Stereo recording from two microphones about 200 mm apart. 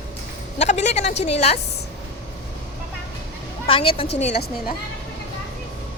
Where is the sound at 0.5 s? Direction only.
35° left (ahead or behind).